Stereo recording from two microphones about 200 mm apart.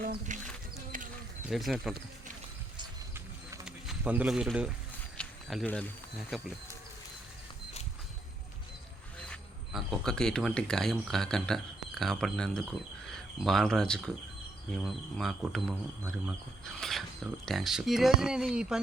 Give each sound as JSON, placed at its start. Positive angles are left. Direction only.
{"t": 0.0, "sound": "speech", "side_deg": -45}
{"t": 0.9, "sound": "a sound", "side_deg": -40}
{"t": 1.5, "sound": "speech", "side_deg": 0}
{"t": 3.7, "sound": "speech", "side_deg": -5}
{"t": 9.1, "sound": "speech", "side_deg": 5}
{"t": 15.2, "sound": "speech", "side_deg": 0}
{"t": 16.1, "sound": "pulleys", "side_deg": 0}
{"t": 17.4, "sound": "speech", "side_deg": 0}